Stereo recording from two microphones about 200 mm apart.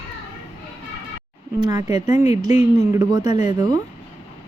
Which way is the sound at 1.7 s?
20° right (ahead or behind).